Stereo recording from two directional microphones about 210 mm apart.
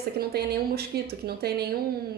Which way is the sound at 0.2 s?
50° right (ahead or behind).